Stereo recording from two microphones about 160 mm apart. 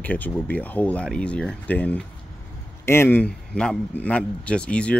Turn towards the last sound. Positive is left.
turn(degrees=5)  # may be behind; listen again after turning